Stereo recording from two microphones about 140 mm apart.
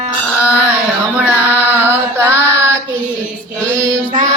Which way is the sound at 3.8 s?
20° right (ahead or behind).